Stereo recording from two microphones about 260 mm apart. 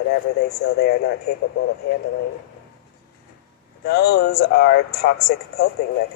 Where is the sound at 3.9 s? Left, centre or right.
Left.